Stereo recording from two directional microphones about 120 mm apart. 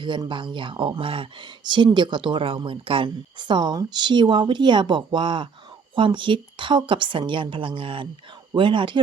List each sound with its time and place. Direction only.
0.0 s a woman's voice: 40° right (ahead or behind)